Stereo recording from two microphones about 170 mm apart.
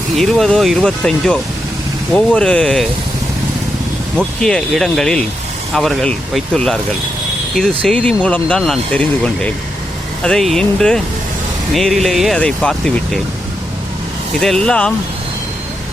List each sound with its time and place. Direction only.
0.2 s speech: centre (ahead or behind)
4.2 s speech: 5° left (ahead or behind)
14.3 s speech: centre (ahead or behind)